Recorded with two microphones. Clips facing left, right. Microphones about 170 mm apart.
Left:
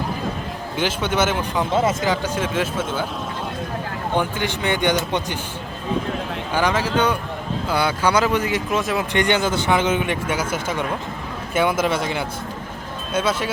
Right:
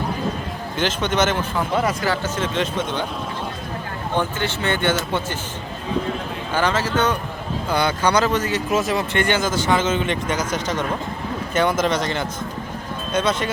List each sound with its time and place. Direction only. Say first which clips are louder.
0.8 s speech: even; 10° left (ahead or behind)
1.7 s speech: left 2 dB; 25° left (ahead or behind); by 3.1 s 5° left (ahead or behind)
4.2 s speech: right 2 dB; 15° left (ahead or behind)
6.5 s speech: even; 10° left (ahead or behind)
8.7 s speech: right 3 dB; centre (ahead or behind)
9.1 s speech: left 3 dB; 15° left (ahead or behind)